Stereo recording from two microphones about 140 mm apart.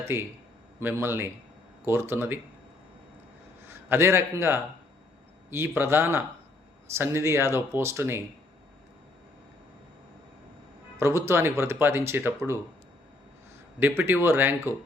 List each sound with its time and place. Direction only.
0.0 s speech: 15° right (ahead or behind)
3.7 s a man's voice: 15° right (ahead or behind)
11.0 s speech: 20° right (ahead or behind)
13.7 s speech: 15° right (ahead or behind)